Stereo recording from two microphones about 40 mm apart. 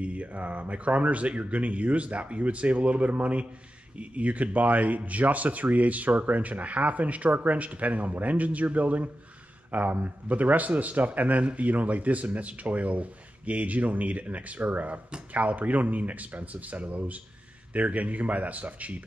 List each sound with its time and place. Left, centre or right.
0.0 s speech: right